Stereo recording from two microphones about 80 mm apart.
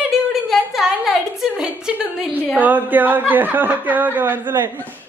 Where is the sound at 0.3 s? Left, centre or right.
Centre.